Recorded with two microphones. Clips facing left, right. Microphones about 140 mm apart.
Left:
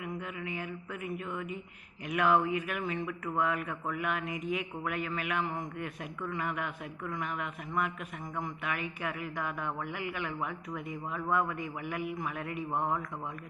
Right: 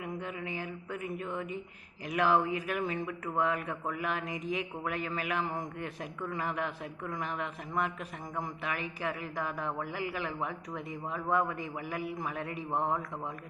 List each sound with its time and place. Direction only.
0.0 s a sound: 30° right (ahead or behind)
2.0 s a woman's voice: 30° right (ahead or behind)
5.4 s a man's voice: centre (ahead or behind)
5.8 s a woman's voice: 30° right (ahead or behind)
8.6 s a woman's voice: 30° right (ahead or behind)